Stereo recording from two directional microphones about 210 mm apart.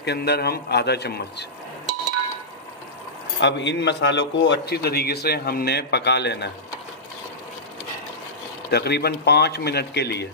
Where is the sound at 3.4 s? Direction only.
55° left (ahead or behind).